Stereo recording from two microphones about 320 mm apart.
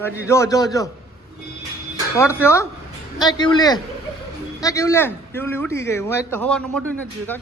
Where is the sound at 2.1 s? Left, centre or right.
Centre.